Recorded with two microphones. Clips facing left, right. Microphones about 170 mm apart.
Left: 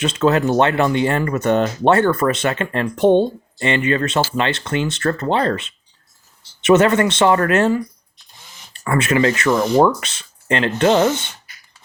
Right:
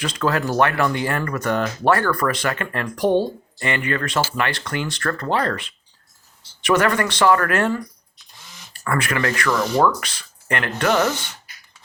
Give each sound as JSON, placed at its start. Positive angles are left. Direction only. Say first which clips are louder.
{"t": 0.0, "sound": "speech", "louder": "left 6 dB", "side_deg": 25}